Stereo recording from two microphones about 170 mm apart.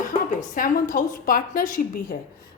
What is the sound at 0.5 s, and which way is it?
A woman's voice, 55° left (ahead or behind).